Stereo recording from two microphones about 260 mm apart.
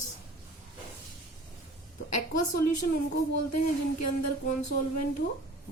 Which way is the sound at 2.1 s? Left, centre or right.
Left.